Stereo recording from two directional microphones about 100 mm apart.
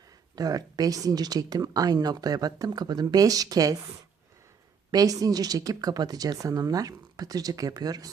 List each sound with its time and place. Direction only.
0.3 s a woman's voice: 40° right (ahead or behind)
4.9 s a woman's voice: 40° right (ahead or behind)